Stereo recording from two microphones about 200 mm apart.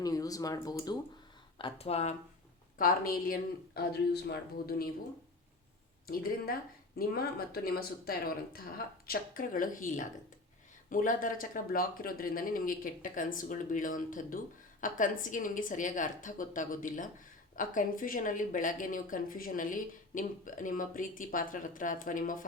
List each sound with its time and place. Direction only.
0.0 s speech: 20° left (ahead or behind)
2.7 s speech: 45° left (ahead or behind)
6.1 s speech: 45° left (ahead or behind)